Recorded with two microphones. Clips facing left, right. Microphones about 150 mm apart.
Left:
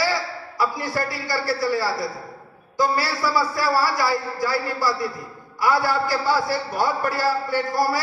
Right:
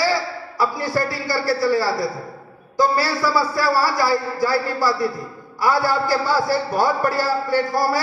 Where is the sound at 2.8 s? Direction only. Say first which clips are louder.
Right 3 dB; 35° right (ahead or behind).